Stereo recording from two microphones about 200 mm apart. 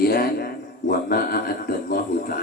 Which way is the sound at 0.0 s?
50° left (ahead or behind).